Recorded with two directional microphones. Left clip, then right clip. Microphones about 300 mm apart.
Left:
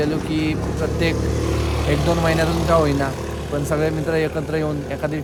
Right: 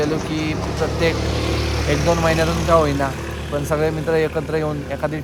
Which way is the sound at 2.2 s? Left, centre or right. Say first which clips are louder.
Right 1 dB; centre.